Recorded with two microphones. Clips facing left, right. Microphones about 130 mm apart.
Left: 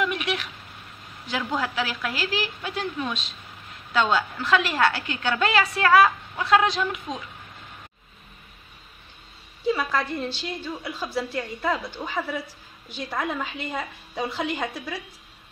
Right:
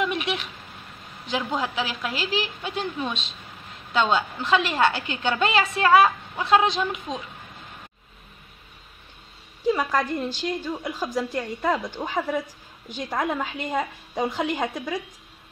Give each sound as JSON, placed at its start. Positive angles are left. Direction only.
{"t": 0.0, "sound": "a sound", "side_deg": -25}
{"t": 1.2, "sound": "a woman's voice", "side_deg": -25}
{"t": 9.7, "sound": "a woman's voice", "side_deg": -15}